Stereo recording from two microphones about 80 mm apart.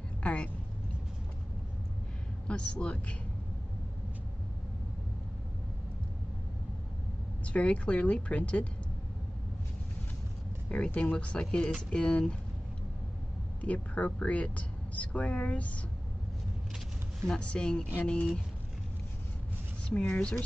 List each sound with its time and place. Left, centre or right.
0.2 s a sound: centre
2.4 s speech: centre
7.4 s speech: centre
10.7 s speech: centre
13.6 s speech: centre
17.3 s speech: centre
19.9 s speech: centre